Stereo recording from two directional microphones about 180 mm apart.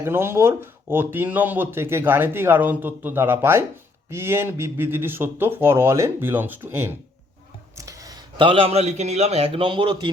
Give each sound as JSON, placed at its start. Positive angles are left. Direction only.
{"t": 0.0, "sound": "speech", "side_deg": -15}